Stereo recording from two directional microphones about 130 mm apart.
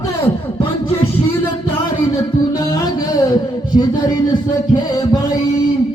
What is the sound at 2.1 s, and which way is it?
Music, 25° left (ahead or behind).